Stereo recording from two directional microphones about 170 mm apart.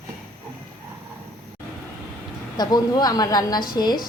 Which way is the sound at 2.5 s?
25° left (ahead or behind).